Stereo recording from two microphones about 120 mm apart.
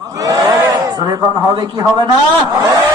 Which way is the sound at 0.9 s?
40° right (ahead or behind).